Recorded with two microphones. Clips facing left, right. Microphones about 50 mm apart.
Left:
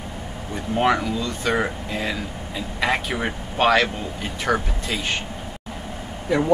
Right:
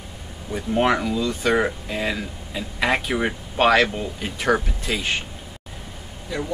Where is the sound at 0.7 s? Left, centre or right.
Centre.